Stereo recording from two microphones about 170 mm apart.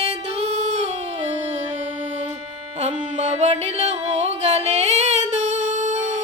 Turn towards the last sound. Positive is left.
turn(degrees=-45)  # may be behind; listen again after turning